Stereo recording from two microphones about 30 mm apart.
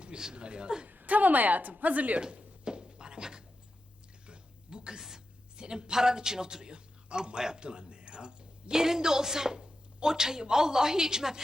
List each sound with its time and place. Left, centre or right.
0.3 s speech: right
0.9 s speech: right
2.6 s thunk: right
4.3 s a sound: right
8.7 s speech: centre